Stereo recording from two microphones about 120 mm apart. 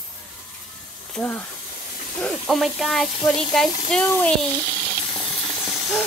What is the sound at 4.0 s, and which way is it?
Speech, 20° left (ahead or behind).